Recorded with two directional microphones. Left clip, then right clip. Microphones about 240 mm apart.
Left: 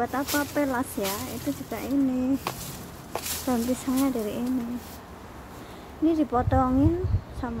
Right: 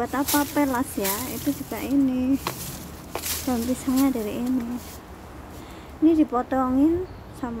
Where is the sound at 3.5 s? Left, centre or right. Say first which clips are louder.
Right 1 dB; centre.